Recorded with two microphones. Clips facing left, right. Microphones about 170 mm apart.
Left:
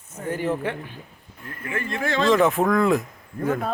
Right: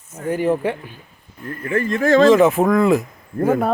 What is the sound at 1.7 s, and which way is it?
Speech, 40° right (ahead or behind).